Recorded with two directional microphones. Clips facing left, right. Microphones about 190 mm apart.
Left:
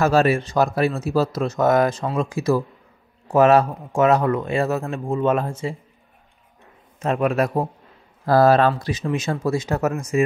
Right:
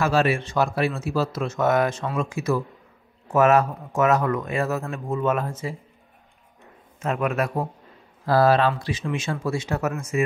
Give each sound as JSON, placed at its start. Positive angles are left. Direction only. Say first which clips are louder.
{"t": 0.0, "sound": "speech", "louder": "left 4 dB", "side_deg": 40}
{"t": 7.0, "sound": "speech", "louder": "left 4 dB", "side_deg": 30}
{"t": 8.3, "sound": "speech", "louder": "left 3 dB", "side_deg": 45}